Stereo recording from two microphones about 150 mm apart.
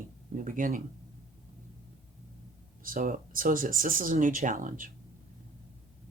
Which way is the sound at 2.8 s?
65° right (ahead or behind).